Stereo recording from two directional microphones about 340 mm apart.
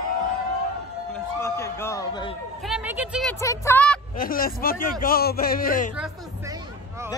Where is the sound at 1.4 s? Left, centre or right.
Centre.